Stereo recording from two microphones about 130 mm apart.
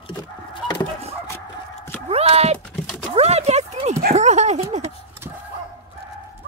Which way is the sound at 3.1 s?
55° right (ahead or behind).